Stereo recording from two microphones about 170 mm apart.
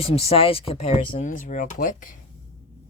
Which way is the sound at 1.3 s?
50° left (ahead or behind).